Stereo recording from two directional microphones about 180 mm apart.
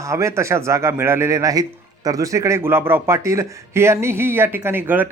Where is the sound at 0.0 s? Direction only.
15° right (ahead or behind).